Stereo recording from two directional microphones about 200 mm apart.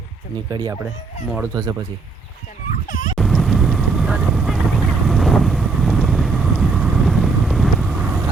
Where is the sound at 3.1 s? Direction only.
Centre (ahead or behind).